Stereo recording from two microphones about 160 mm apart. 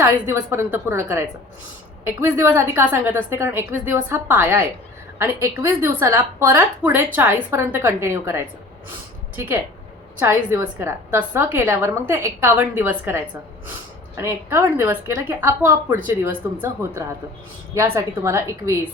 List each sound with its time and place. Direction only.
0.0 s a woman's voice: 15° right (ahead or behind)
10.2 s a woman's voice: 15° right (ahead or behind)